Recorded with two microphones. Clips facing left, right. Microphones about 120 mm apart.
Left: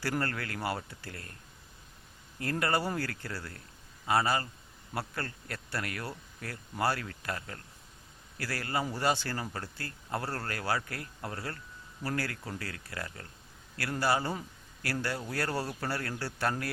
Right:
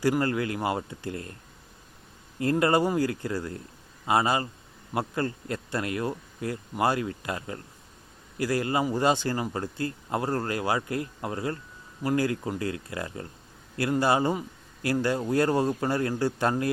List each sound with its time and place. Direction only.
0.0 s speech: 15° right (ahead or behind)
2.4 s speech: 20° right (ahead or behind)